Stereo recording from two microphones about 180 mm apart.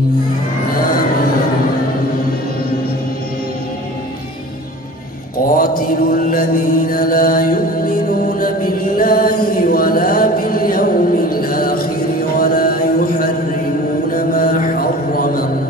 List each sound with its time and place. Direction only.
5.6 s mantra: 50° left (ahead or behind)